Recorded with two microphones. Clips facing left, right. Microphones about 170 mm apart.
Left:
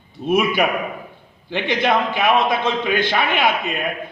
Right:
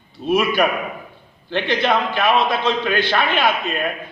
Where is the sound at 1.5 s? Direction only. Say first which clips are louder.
Even; 15° left (ahead or behind).